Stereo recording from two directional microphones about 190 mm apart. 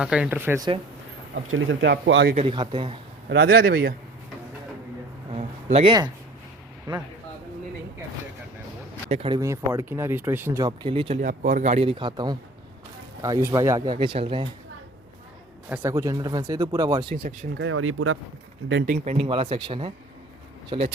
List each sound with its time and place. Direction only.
0.0 s speech: 5° right (ahead or behind)
1.5 s speech: 90° right; by 2.3 s 70° right (ahead or behind)
2.3 s speech: 30° right (ahead or behind)
3.2 s speech: 55° right (ahead or behind)
5.3 s a sound: 35° right (ahead or behind)
9.0 s speech: 35° right (ahead or behind)
9.3 s speech: 15° right (ahead or behind)
11.2 s speech: 45° right (ahead or behind); by 14.4 s 25° right (ahead or behind)
15.7 s speech: 15° right (ahead or behind)
17.5 s speech: 85° right
18.9 s speech: 35° right (ahead or behind)